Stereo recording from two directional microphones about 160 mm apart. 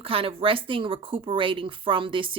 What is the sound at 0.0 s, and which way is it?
Speech, 35° right (ahead or behind).